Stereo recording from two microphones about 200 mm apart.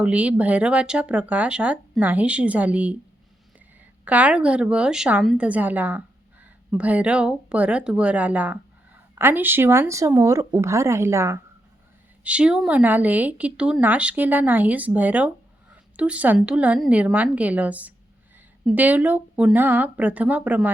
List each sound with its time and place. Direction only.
0.0 s speech: 5° right (ahead or behind)
4.0 s a woman's voice: 5° right (ahead or behind)